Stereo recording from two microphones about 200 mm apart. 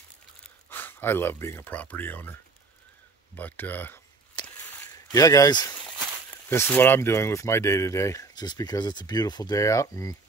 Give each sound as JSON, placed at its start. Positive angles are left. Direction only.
{"t": 0.4, "sound": "speech", "side_deg": 10}
{"t": 3.3, "sound": "speech", "side_deg": 10}
{"t": 4.6, "sound": "a sound", "side_deg": 15}
{"t": 6.5, "sound": "speech", "side_deg": 10}